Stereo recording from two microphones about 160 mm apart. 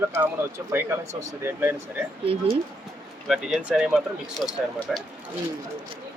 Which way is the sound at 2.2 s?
35° right (ahead or behind).